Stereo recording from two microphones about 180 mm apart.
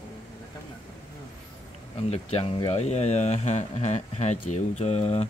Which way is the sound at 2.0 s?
35° left (ahead or behind).